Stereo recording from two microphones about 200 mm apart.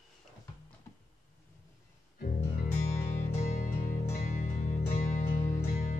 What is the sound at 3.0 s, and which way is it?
Music, 35° left (ahead or behind).